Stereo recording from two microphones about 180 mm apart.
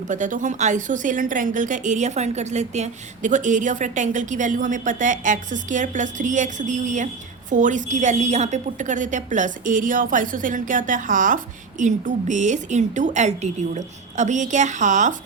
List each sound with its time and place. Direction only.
0.1 s speech: 45° right (ahead or behind)